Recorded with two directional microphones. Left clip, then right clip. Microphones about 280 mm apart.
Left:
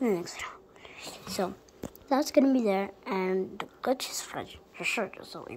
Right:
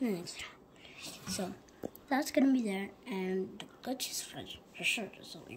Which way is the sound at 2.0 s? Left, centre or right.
Centre.